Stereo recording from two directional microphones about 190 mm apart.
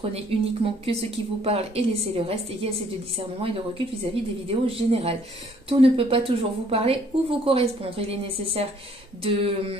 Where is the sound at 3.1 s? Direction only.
30° right (ahead or behind).